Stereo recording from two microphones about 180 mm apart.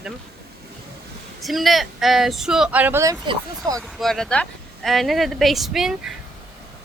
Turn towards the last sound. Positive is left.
turn(degrees=0)  # may be behind; listen again after turning